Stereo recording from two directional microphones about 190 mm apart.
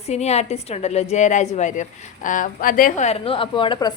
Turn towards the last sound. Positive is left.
turn(degrees=25)  # may be behind; listen again after turning